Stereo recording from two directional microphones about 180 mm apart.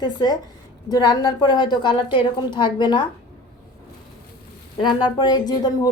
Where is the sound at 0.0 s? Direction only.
20° left (ahead or behind).